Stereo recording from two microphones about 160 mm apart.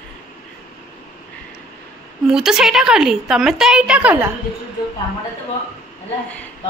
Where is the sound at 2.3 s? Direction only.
5° right (ahead or behind).